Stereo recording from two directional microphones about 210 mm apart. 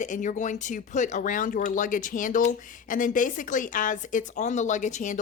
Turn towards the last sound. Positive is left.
turn(degrees=35)  # may be behind; listen again after turning